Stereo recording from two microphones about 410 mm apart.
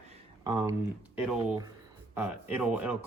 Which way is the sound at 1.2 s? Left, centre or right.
Centre.